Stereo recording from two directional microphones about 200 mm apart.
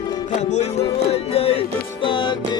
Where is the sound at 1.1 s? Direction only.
30° left (ahead or behind).